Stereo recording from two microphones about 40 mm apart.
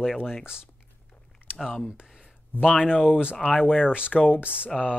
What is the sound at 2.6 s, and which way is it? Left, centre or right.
Speech, left.